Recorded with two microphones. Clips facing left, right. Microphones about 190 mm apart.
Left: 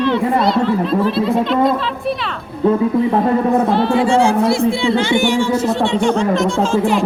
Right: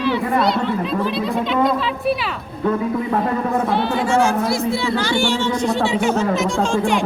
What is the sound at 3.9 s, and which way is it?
Speech, 30° left (ahead or behind).